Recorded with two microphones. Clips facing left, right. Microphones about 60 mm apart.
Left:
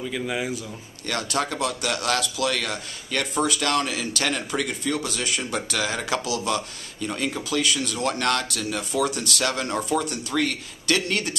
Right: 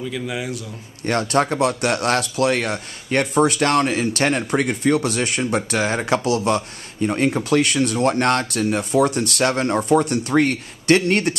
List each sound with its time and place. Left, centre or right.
0.1 s a man's voice: centre
1.0 s speech: right
9.8 s speech: right